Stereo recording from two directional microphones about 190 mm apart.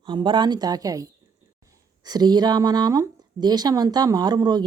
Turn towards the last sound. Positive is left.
turn(degrees=-20)  # may be behind; listen again after turning